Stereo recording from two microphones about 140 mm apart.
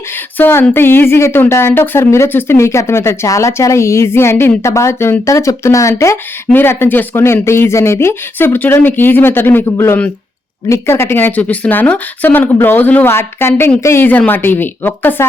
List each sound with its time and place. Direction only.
0.3 s a woman's voice: 15° left (ahead or behind)